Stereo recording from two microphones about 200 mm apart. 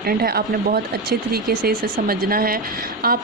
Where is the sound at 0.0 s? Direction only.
50° right (ahead or behind).